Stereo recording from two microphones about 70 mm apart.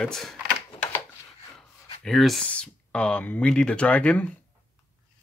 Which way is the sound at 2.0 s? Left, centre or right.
Centre.